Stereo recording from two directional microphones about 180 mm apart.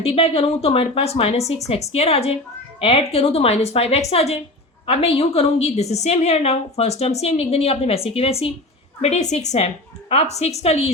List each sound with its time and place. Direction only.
0.0 s a woman's voice: 35° left (ahead or behind)